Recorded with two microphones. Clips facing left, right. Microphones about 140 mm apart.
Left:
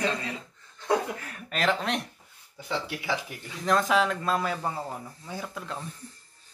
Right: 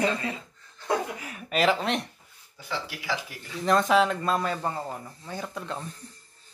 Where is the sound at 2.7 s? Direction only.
20° left (ahead or behind).